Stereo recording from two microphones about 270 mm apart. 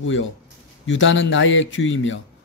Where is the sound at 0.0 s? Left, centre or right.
Left.